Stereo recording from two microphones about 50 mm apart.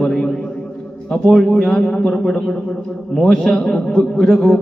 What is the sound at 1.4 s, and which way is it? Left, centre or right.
A man's voice, centre.